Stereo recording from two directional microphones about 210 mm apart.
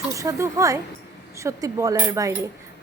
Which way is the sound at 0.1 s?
15° right (ahead or behind).